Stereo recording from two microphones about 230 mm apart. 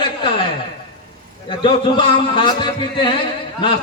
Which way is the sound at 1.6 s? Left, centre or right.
Left.